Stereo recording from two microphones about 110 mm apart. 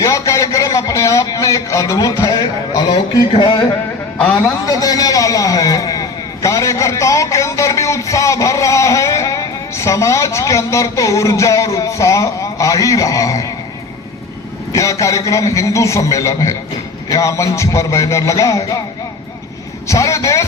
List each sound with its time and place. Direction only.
0.0 s a man's voice: 30° left (ahead or behind)
4.2 s a man's voice: 10° left (ahead or behind)
4.6 s a man's voice: 30° left (ahead or behind)
14.7 s a man's voice: 30° left (ahead or behind)
19.9 s a man's voice: 30° left (ahead or behind)